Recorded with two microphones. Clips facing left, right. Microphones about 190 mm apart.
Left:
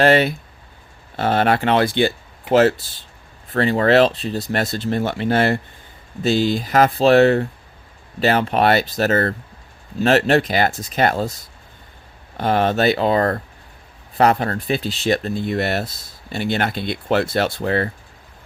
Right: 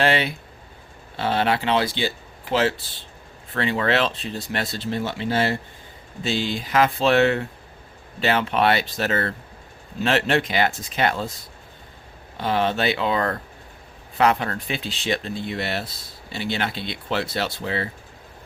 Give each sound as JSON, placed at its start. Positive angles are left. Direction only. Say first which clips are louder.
{"t": 0.0, "sound": "speech", "louder": "left 6 dB", "side_deg": 45}
{"t": 6.2, "sound": "speech", "louder": "left 7 dB", "side_deg": 40}
{"t": 12.4, "sound": "speech", "louder": "left 5 dB", "side_deg": 50}